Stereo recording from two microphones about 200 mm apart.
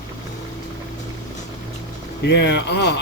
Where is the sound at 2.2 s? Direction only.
60° left (ahead or behind).